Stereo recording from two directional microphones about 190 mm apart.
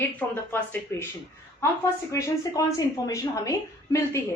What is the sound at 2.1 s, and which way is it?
A woman's voice, 15° left (ahead or behind).